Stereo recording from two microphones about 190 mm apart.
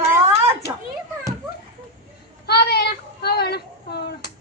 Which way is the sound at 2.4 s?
55° left (ahead or behind).